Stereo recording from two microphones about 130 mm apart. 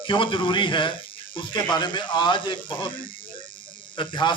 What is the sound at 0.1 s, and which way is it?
A man's voice, 40° left (ahead or behind).